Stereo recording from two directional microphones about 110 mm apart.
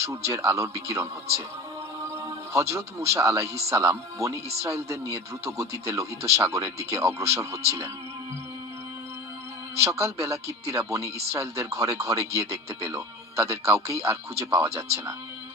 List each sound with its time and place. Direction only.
0.0 s speech: 25° right (ahead or behind)
2.5 s speech: 25° right (ahead or behind)
9.8 s speech: 25° right (ahead or behind)